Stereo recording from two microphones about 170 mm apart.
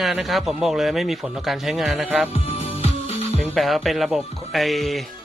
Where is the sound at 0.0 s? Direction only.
Centre (ahead or behind).